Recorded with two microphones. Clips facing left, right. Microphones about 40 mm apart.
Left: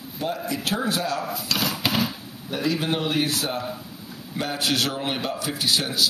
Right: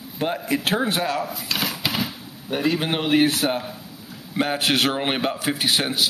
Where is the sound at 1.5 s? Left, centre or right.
Right.